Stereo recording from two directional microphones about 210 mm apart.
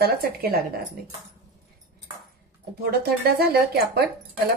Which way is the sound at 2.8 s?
50° right (ahead or behind).